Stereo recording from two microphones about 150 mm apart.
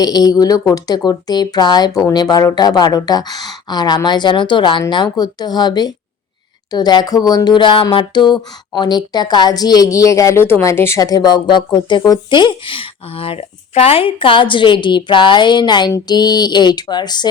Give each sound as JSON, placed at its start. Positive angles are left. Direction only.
{"t": 0.0, "sound": "speech", "side_deg": 25}